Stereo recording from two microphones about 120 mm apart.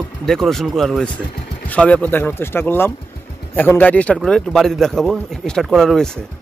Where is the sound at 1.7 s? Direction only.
10° left (ahead or behind).